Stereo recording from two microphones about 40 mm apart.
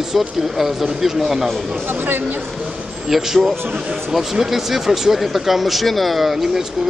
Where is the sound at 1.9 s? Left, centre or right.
Right.